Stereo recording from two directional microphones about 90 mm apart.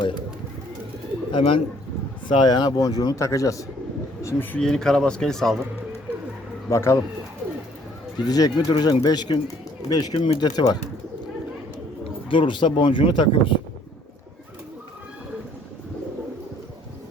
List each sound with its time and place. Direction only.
1.3 s speech: 80° left
2.2 s speech: 60° left (ahead or behind); by 4.4 s 30° left (ahead or behind)
4.5 s speech: 5° left (ahead or behind)
6.7 s speech: 30° left (ahead or behind)
8.2 s speech: 50° left (ahead or behind)
10.2 s speech: 80° left
10.4 s speech: 55° left (ahead or behind)
12.3 s speech: 65° left (ahead or behind)